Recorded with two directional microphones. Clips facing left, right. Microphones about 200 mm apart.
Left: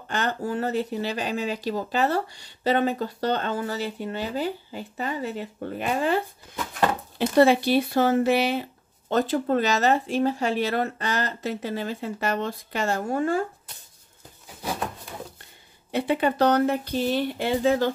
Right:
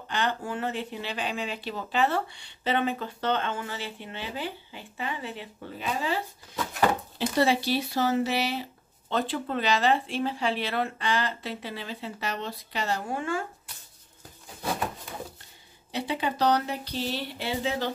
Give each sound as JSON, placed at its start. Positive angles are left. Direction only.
{"t": 0.1, "sound": "speech", "side_deg": 45}
{"t": 9.1, "sound": "speech", "side_deg": 45}
{"t": 15.9, "sound": "speech", "side_deg": 55}